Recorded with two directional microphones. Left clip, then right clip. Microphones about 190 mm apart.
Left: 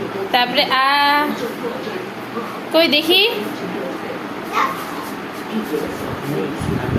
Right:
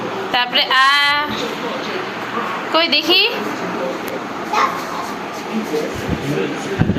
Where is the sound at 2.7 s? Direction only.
20° left (ahead or behind).